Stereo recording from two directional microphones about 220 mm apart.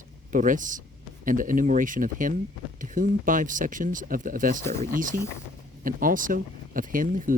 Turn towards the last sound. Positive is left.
turn(degrees=-40)  # may be behind; listen again after turning